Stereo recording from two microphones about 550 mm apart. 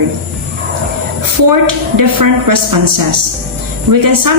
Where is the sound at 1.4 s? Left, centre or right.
Right.